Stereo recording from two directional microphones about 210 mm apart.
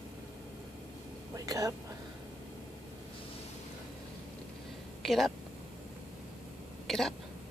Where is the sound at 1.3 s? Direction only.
15° right (ahead or behind).